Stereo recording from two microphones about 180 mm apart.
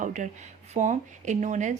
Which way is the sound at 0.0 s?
45° right (ahead or behind).